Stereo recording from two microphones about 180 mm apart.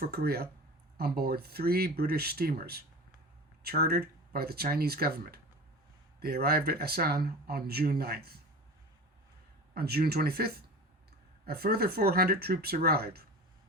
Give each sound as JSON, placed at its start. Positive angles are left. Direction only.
{"t": 0.0, "sound": "speech", "side_deg": -60}
{"t": 9.7, "sound": "speech", "side_deg": -60}